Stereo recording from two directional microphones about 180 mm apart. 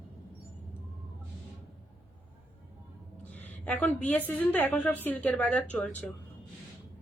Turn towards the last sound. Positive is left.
turn(degrees=10)  # may be behind; listen again after turning